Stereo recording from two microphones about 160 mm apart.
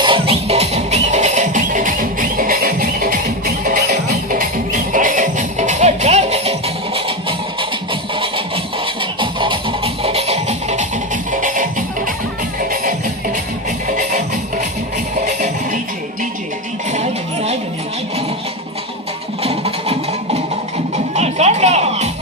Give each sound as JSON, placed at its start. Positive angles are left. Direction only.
{"t": 0.0, "sound": "music", "side_deg": -35}
{"t": 16.9, "sound": "a sound", "side_deg": -40}
{"t": 19.4, "sound": "music", "side_deg": -40}